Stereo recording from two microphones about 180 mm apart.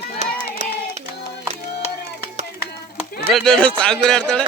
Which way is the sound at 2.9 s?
60° left (ahead or behind).